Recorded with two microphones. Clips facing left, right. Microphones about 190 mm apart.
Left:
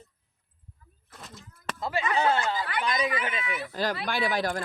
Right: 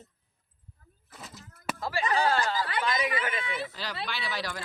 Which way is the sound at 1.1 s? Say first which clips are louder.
Even; centre (ahead or behind).